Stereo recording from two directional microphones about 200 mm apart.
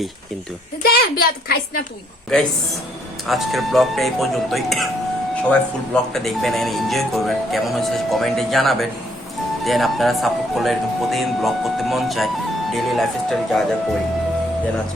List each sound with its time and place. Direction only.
0.8 s a woman's voice: 50° left (ahead or behind)
3.2 s speech: centre (ahead or behind)